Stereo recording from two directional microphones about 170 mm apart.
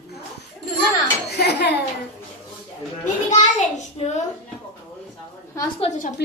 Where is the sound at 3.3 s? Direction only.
45° left (ahead or behind).